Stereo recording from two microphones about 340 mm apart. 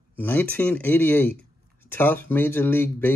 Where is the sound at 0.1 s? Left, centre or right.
Centre.